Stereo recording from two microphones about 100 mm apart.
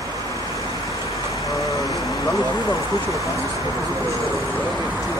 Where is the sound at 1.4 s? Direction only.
35° left (ahead or behind).